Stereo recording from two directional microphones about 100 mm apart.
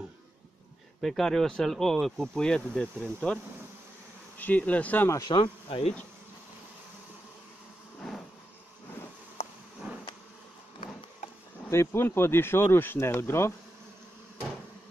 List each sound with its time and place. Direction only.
1.0 s speech: centre (ahead or behind)
4.4 s insect: 15° left (ahead or behind)
5.3 s speech: 65° left (ahead or behind)
9.4 s a sound: 90° left
9.9 s a sound: 15° right (ahead or behind)
11.7 s speech: 25° left (ahead or behind)